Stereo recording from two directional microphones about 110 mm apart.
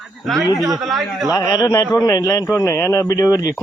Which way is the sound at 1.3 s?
35° left (ahead or behind).